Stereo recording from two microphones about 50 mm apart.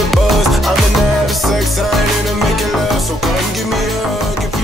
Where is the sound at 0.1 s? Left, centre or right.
Centre.